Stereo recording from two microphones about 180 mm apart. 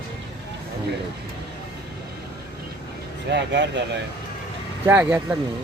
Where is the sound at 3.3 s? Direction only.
75° right (ahead or behind).